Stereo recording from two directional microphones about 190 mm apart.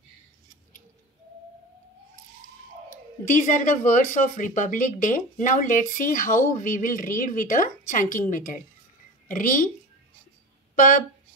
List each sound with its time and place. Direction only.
2.9 s speech: 40° left (ahead or behind)